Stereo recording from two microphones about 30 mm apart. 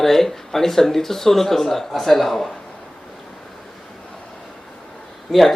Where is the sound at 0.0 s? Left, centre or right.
Centre.